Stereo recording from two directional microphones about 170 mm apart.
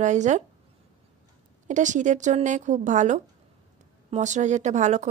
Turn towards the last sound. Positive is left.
turn(degrees=-45)  # may be behind; listen again after turning